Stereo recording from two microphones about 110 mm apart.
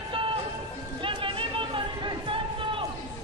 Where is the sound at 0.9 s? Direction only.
50° right (ahead or behind).